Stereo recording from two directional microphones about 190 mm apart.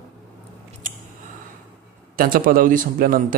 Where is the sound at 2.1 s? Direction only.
50° right (ahead or behind).